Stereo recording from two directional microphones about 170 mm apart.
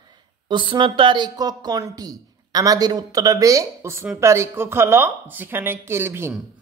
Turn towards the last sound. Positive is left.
turn(degrees=-15)  # may be behind; listen again after turning